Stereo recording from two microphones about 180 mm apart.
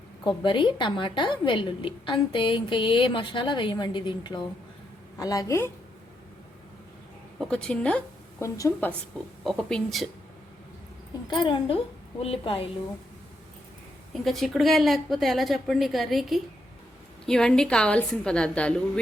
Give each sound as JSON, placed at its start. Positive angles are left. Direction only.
{"t": 0.3, "sound": "a woman's voice", "side_deg": 25}
{"t": 7.3, "sound": "a woman's voice", "side_deg": 5}
{"t": 9.4, "sound": "a woman's voice", "side_deg": 0}
{"t": 11.3, "sound": "a woman's voice", "side_deg": 25}
{"t": 14.1, "sound": "a woman's voice", "side_deg": 0}